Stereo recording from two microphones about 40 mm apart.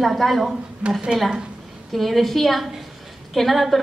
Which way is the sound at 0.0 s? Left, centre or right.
Centre.